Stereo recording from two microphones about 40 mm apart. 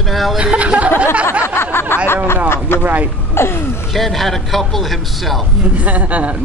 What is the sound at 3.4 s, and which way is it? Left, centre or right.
Speech, left.